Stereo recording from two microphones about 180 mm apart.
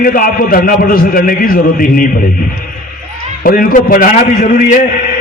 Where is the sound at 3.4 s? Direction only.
50° left (ahead or behind).